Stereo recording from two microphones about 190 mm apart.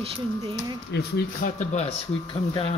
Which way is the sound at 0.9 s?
55° left (ahead or behind).